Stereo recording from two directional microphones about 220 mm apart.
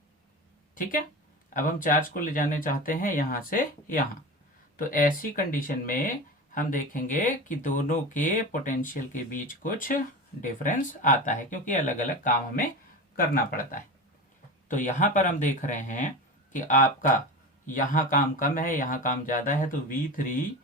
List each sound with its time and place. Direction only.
0.8 s speech: 40° left (ahead or behind)